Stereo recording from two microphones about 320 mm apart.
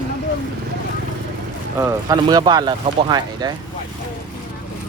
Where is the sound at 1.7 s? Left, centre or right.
Centre.